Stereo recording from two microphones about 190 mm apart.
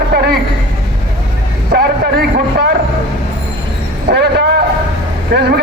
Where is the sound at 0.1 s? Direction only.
55° right (ahead or behind).